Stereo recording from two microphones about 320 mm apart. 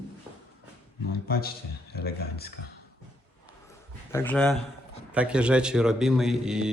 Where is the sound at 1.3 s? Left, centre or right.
Left.